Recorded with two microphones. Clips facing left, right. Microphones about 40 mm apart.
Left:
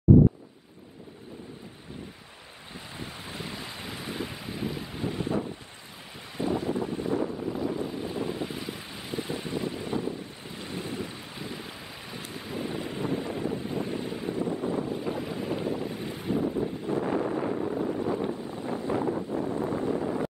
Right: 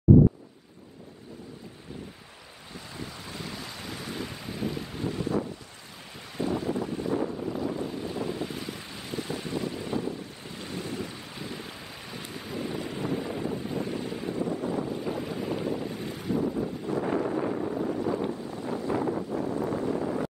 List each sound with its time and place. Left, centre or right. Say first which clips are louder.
2.7 s wind: even; left
5.1 s wind noise: right 1 dB; left
6.3 s wind noise: left 1 dB; centre
7.3 s wind: left 1 dB; centre
12.8 s wind noise: even; centre
14.4 s wind noise: even; left
14.9 s boat: even; centre
16.2 s wind noise: even; left
17.4 s wind noise: even; centre
17.9 s wind noise: even; left
20.0 s boat: even; centre